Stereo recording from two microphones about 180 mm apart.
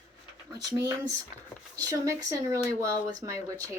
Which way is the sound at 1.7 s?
20° right (ahead or behind).